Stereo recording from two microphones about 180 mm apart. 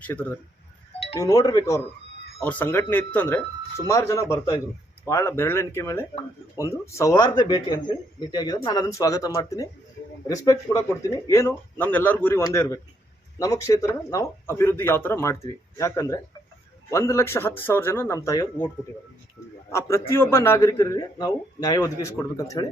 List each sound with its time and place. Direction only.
0.1 s a man's voice: 10° left (ahead or behind)
19.7 s a man's voice: 15° left (ahead or behind)